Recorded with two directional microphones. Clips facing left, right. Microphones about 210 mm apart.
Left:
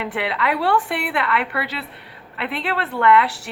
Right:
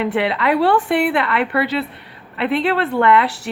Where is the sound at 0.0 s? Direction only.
25° right (ahead or behind).